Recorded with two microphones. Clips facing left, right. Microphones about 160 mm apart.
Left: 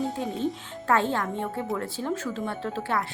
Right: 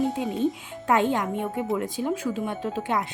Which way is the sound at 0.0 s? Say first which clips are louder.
Right 3 dB; 20° right (ahead or behind).